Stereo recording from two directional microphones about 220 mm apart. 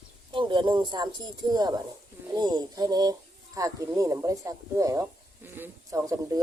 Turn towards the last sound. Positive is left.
turn(degrees=-15)  # may be behind; listen again after turning